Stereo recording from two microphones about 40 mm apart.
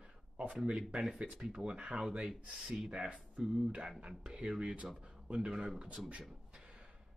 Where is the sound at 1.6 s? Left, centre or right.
Right.